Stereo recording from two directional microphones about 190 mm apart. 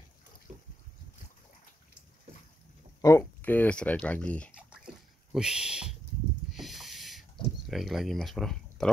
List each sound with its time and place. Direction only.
0.5 s boat: 40° right (ahead or behind)
3.0 s speech: 15° left (ahead or behind)
5.3 s speech: 5° right (ahead or behind)
6.5 s snake: centre (ahead or behind)
7.6 s speech: centre (ahead or behind)